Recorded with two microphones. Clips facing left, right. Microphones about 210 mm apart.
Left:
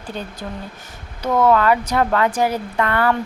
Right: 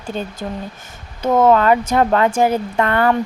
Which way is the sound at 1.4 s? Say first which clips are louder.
Right 2 dB; 25° right (ahead or behind).